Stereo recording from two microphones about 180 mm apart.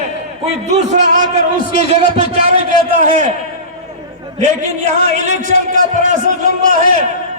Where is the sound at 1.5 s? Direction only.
55° left (ahead or behind).